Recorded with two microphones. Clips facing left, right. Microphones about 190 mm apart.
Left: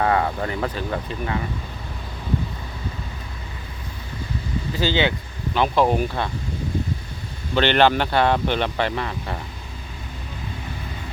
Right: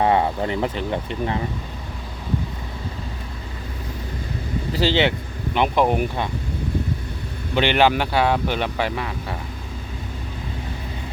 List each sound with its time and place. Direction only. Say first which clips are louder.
0.0 s speech: right 2 dB; 20° right (ahead or behind)
4.7 s speech: right 2 dB; 30° right (ahead or behind)
5.5 s speech: even; 15° right (ahead or behind)
7.5 s speech: left 1 dB; 10° right (ahead or behind)